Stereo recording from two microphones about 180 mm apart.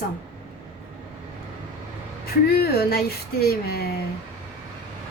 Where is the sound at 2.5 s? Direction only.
60° left (ahead or behind).